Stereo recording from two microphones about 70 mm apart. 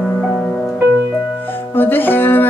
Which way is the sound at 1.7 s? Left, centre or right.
Left.